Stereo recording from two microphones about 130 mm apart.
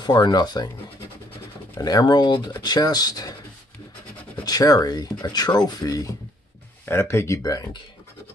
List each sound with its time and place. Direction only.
0.0 s speech: 35° left (ahead or behind)
1.8 s speech: 30° left (ahead or behind)
4.5 s speech: 30° left (ahead or behind)
6.9 s speech: 20° left (ahead or behind)